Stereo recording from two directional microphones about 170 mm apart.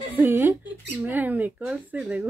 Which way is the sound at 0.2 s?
10° right (ahead or behind).